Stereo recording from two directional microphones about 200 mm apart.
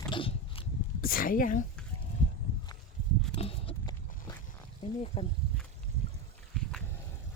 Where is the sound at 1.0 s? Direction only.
45° left (ahead or behind).